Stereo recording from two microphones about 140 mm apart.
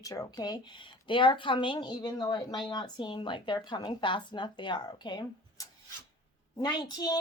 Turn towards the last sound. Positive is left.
turn(degrees=30)  # may be behind; listen again after turning